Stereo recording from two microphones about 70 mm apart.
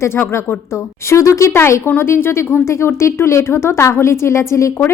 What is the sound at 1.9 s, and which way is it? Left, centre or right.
Speech, left.